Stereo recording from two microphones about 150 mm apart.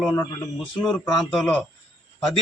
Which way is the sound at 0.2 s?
25° left (ahead or behind).